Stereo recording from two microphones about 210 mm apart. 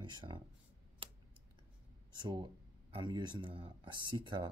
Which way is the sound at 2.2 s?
20° right (ahead or behind).